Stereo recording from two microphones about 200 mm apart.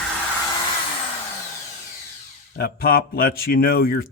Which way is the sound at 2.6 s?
50° left (ahead or behind).